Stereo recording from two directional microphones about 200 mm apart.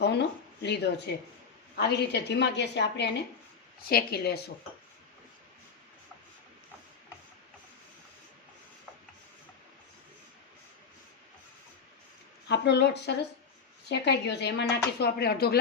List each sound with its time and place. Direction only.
0.0 s a sound: 60° left (ahead or behind)
1.7 s speech: 55° left (ahead or behind)
12.5 s speech: 60° left (ahead or behind)